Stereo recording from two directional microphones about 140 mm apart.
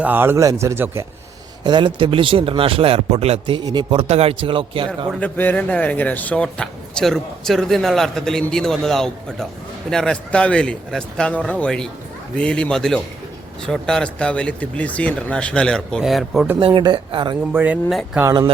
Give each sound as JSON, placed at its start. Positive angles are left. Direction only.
{"t": 0.0, "sound": "a man's voice", "side_deg": -15}
{"t": 1.6, "sound": "speech", "side_deg": -35}
{"t": 4.0, "sound": "a man's voice", "side_deg": -50}
{"t": 5.2, "sound": "speech", "side_deg": 10}
{"t": 16.6, "sound": "speech", "side_deg": -35}
{"t": 17.5, "sound": "a man's voice", "side_deg": -15}
{"t": 17.8, "sound": "speech", "side_deg": 0}
{"t": 18.2, "sound": "speech", "side_deg": -25}